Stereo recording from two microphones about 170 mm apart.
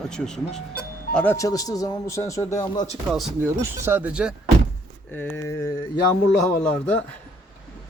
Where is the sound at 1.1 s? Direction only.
15° left (ahead or behind).